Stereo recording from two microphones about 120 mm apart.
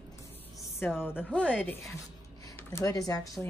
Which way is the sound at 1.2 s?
10° left (ahead or behind).